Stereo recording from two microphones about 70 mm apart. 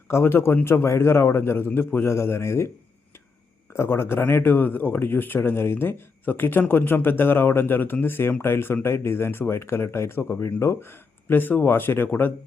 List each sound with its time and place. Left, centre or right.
0.1 s speech: left